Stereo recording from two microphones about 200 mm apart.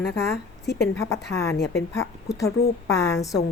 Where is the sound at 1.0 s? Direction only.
15° left (ahead or behind).